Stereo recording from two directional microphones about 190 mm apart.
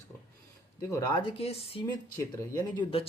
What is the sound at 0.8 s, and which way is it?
Speech, 20° left (ahead or behind).